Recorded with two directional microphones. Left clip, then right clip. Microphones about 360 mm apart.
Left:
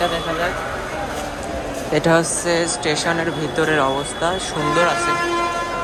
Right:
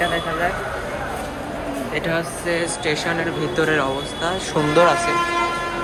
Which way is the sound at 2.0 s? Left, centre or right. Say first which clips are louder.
Left 9 dB; centre.